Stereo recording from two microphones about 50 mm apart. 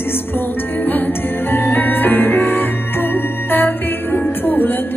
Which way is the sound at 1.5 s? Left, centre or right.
Left.